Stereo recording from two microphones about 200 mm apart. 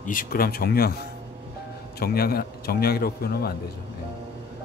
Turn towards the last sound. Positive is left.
turn(degrees=50)  # may be behind; listen again after turning